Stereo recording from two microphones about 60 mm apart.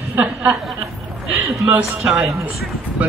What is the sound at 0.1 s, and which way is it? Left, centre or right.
Chuckle, right.